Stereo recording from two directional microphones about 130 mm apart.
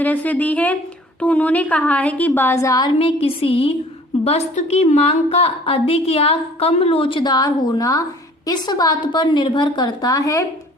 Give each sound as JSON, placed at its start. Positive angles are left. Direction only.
{"t": 0.0, "sound": "a woman's voice", "side_deg": 15}
{"t": 3.0, "sound": "a woman's voice", "side_deg": 45}
{"t": 4.2, "sound": "a woman's voice", "side_deg": 55}